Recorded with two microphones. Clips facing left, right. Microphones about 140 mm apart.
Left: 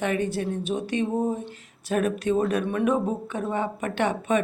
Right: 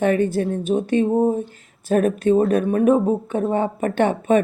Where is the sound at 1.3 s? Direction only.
45° right (ahead or behind).